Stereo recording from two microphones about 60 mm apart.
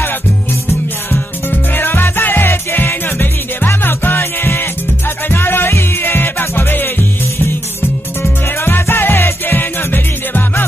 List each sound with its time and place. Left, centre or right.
1.1 s music: left
8.2 s music: left